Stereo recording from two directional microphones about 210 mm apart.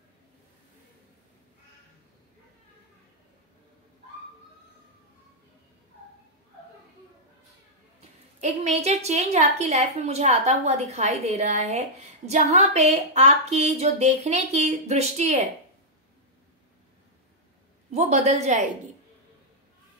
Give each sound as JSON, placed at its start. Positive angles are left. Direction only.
{"t": 8.0, "sound": "a woman's voice", "side_deg": -30}
{"t": 17.9, "sound": "a woman's voice", "side_deg": -30}